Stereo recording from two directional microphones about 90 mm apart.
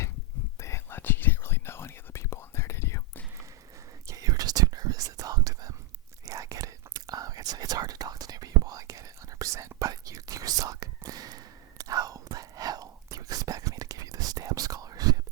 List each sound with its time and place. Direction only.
0.6 s whispering: 30° left (ahead or behind)
4.1 s whispering: 40° right (ahead or behind)